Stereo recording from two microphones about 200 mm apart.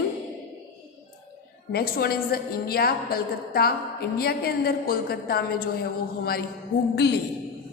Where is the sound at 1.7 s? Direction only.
50° left (ahead or behind).